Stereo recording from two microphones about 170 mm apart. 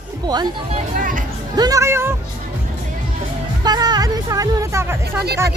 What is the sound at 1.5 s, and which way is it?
Speech, 20° right (ahead or behind).